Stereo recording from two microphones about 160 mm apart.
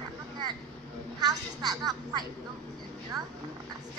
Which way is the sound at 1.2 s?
25° right (ahead or behind).